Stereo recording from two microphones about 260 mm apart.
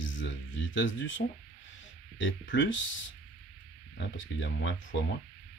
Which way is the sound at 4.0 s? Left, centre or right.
Left.